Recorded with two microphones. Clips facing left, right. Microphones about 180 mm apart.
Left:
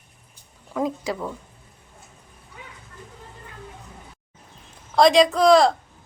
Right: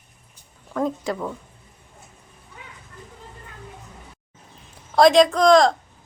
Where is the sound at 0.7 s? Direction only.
5° left (ahead or behind).